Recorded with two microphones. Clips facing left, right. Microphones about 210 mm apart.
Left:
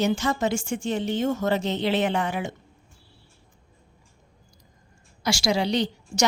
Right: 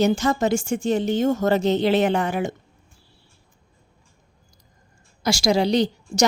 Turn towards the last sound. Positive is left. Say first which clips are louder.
# right 4 dB
turn(degrees=-40)  # may be behind; listen again after turning